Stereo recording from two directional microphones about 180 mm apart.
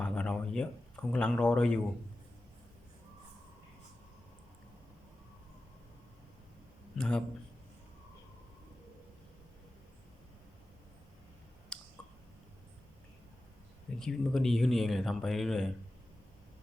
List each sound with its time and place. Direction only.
0.0 s speech: 5° left (ahead or behind)
7.0 s speech: centre (ahead or behind)
11.7 s clicking: 5° left (ahead or behind)
14.0 s speech: centre (ahead or behind)